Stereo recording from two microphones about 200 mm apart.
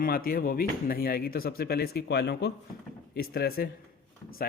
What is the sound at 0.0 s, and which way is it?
Speech, 50° left (ahead or behind).